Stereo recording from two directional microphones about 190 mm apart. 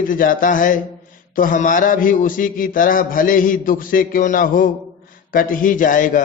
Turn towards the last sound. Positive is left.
turn(degrees=45)  # may be behind; listen again after turning